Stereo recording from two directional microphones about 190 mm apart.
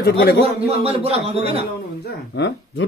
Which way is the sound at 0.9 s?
30° right (ahead or behind).